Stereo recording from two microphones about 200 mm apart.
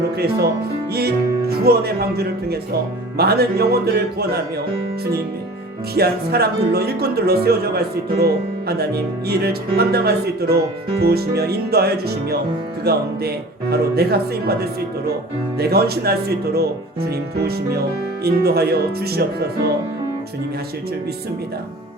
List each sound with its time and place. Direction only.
0.9 s speech: 50° right (ahead or behind)
5.9 s speech: 50° right (ahead or behind)